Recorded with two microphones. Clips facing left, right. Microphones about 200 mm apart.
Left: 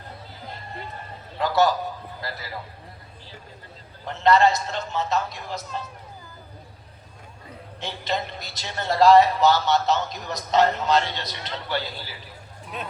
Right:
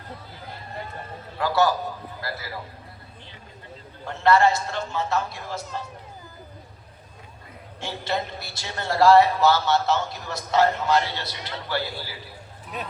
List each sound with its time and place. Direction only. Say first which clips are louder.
1.4 s a man's voice: left 1 dB; 20° left (ahead or behind)
4.0 s a man's voice: even; 20° left (ahead or behind)
7.8 s a man's voice: even; 15° left (ahead or behind)